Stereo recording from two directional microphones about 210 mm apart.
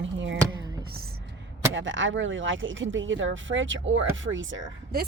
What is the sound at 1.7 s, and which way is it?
Speech, 65° right (ahead or behind).